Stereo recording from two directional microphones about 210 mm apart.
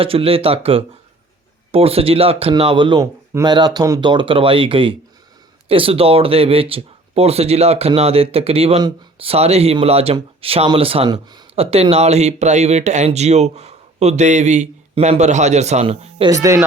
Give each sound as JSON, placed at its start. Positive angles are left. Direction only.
{"t": 0.0, "sound": "speech", "side_deg": -25}
{"t": 16.3, "sound": "speech", "side_deg": -15}